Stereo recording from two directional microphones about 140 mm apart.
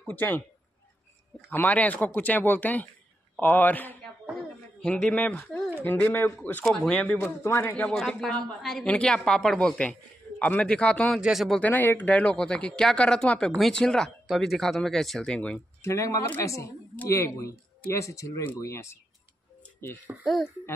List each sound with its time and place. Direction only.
0.0 s speech: 15° left (ahead or behind)
1.5 s speech: 10° left (ahead or behind)
4.3 s a sound: centre (ahead or behind)
5.9 s speech: 15° left (ahead or behind)
7.9 s speech: 5° left (ahead or behind)
11.1 s speech: 5° right (ahead or behind)
11.7 s speech: 15° left (ahead or behind)
15.8 s speech: 20° left (ahead or behind)
20.1 s speech: 5° right (ahead or behind)